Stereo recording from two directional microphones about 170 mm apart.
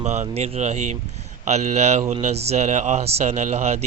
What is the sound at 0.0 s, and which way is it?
Speech, 40° right (ahead or behind).